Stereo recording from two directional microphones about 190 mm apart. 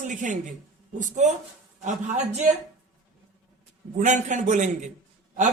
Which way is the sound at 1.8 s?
40° right (ahead or behind).